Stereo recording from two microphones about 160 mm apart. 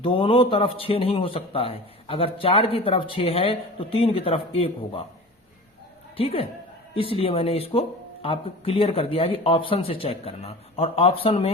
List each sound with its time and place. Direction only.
0.0 s a man's voice: 35° left (ahead or behind)
6.1 s a man's voice: 35° left (ahead or behind)